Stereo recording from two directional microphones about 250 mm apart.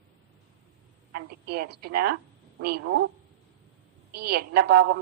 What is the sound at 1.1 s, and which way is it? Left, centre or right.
A woman's voice, right.